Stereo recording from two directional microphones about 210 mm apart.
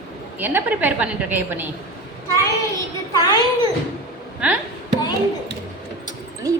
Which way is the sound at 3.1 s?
15° left (ahead or behind).